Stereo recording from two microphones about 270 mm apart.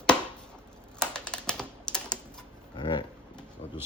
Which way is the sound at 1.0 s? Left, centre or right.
Centre.